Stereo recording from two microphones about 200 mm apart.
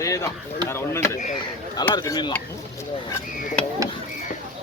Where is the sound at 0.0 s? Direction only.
15° left (ahead or behind).